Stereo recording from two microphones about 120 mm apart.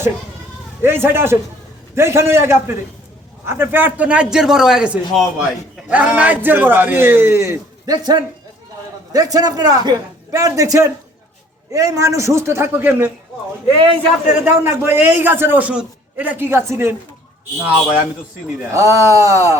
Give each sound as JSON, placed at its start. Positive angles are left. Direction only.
{"t": 0.8, "sound": "a man's voice", "side_deg": -20}
{"t": 14.4, "sound": "a man's voice", "side_deg": -20}
{"t": 18.7, "sound": "a man's voice", "side_deg": -25}